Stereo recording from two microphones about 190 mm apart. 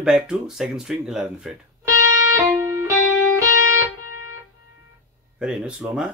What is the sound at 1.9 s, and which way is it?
Music, 15° right (ahead or behind).